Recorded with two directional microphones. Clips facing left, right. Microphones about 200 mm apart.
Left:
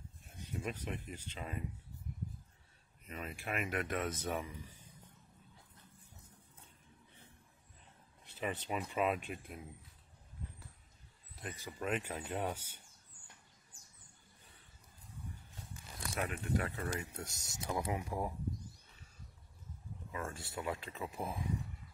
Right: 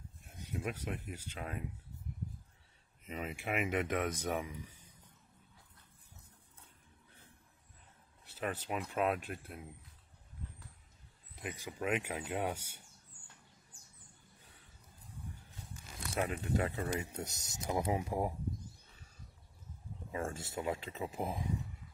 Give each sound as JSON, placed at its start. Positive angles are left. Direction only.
{"t": 0.4, "sound": "speech", "side_deg": -10}
{"t": 3.1, "sound": "speech", "side_deg": -20}
{"t": 8.4, "sound": "speech", "side_deg": 0}
{"t": 11.4, "sound": "speech", "side_deg": -10}
{"t": 16.3, "sound": "speech", "side_deg": -20}
{"t": 20.1, "sound": "speech", "side_deg": -30}